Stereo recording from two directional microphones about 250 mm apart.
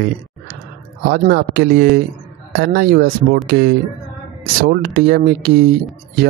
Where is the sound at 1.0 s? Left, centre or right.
Right.